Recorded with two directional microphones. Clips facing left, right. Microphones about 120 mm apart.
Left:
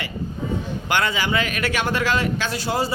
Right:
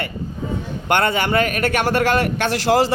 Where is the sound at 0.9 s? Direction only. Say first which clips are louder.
Right 5 dB; 55° right (ahead or behind).